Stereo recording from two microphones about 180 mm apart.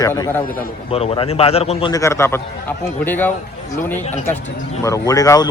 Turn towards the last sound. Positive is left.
turn(degrees=20)  # may be behind; listen again after turning